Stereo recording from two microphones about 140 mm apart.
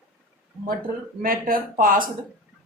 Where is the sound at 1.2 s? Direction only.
90° right.